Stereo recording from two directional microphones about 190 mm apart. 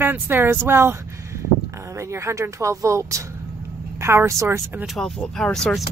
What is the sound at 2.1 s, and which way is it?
Speech, 15° right (ahead or behind).